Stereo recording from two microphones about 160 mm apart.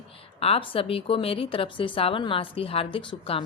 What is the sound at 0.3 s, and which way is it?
A woman's voice, 40° left (ahead or behind).